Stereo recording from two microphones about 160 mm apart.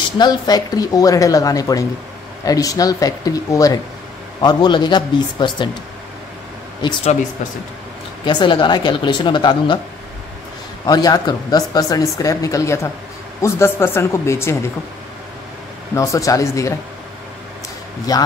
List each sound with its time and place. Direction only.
0.2 s speech: 25° left (ahead or behind)
8.3 s speech: 30° left (ahead or behind)
10.9 s speech: 25° left (ahead or behind)
15.9 s speech: 20° left (ahead or behind)
18.1 s speech: 25° left (ahead or behind)